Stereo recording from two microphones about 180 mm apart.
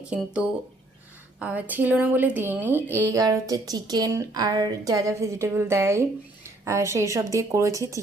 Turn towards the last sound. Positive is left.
turn(degrees=-20)  # may be behind; listen again after turning